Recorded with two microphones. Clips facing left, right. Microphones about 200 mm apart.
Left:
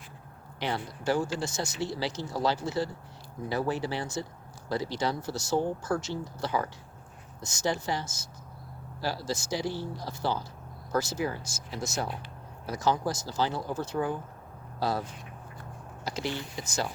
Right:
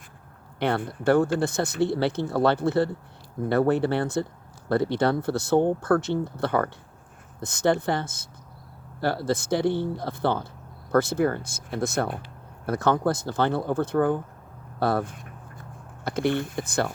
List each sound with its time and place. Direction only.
0.6 s speech: 55° right (ahead or behind)